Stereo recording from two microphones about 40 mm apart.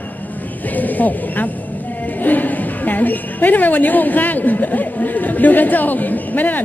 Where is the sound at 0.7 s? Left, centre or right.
Left.